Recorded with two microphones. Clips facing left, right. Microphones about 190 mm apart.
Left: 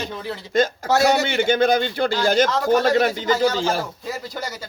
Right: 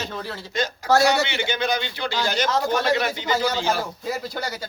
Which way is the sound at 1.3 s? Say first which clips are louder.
Left 7 dB; 50° left (ahead or behind).